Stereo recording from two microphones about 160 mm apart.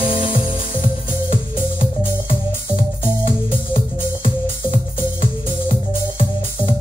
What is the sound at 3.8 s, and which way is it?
Music, 35° left (ahead or behind).